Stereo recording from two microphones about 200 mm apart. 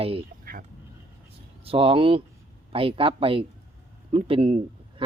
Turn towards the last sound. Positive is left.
turn(degrees=-25)  # may be behind; listen again after turning